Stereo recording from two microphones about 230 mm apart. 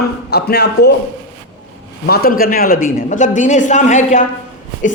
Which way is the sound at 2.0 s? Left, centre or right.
Left.